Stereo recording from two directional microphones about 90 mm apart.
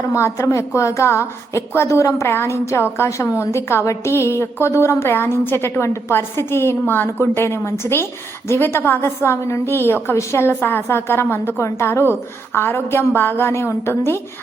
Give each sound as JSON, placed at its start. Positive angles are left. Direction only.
{"t": 0.1, "sound": "a woman's voice", "side_deg": 30}